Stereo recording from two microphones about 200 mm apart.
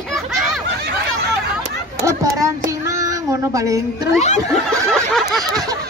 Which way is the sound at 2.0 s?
15° right (ahead or behind).